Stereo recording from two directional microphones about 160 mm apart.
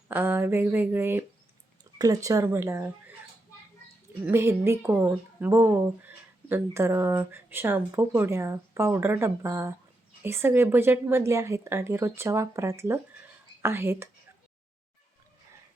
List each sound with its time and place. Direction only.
0.1 s speech: 15° right (ahead or behind)
4.3 s speech: 15° right (ahead or behind)